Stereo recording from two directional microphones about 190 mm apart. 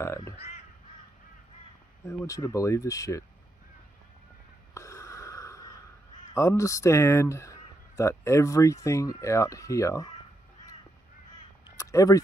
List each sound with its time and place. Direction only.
0.0 s speech: 15° left (ahead or behind)
2.0 s speech: 15° left (ahead or behind)
4.7 s wheeze: 15° left (ahead or behind)
6.1 s speech: 15° left (ahead or behind)
11.7 s a sound: 15° left (ahead or behind)